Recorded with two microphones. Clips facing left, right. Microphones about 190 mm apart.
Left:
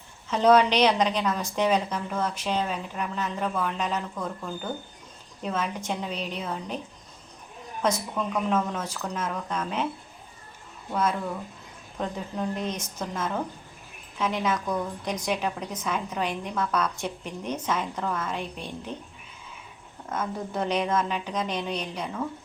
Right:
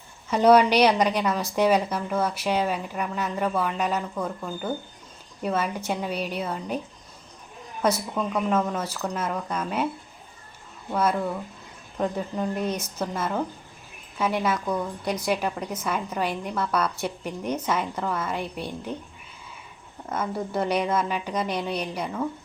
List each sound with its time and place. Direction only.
0.3 s a woman's voice: 10° right (ahead or behind)
7.8 s a woman's voice: 10° right (ahead or behind)
11.9 s a woman's voice: 5° right (ahead or behind)
20.1 s a woman's voice: 10° right (ahead or behind)